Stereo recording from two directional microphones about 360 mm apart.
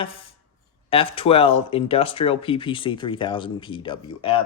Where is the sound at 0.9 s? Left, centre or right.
Centre.